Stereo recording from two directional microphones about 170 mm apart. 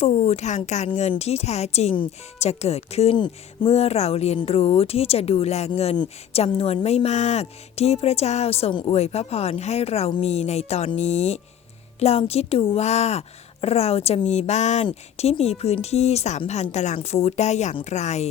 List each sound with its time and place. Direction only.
0.0 s speech: 40° left (ahead or behind)